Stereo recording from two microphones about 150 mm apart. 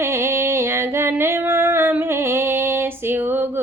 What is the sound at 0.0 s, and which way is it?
Female singing, 15° right (ahead or behind).